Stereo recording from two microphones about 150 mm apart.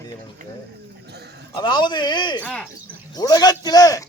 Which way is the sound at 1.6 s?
30° left (ahead or behind).